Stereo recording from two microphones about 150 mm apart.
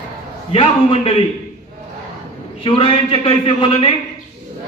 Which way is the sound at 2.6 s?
35° left (ahead or behind).